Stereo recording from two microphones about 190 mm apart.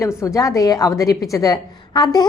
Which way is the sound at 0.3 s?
15° left (ahead or behind).